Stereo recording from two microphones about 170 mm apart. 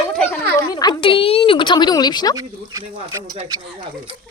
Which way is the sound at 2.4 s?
20° right (ahead or behind).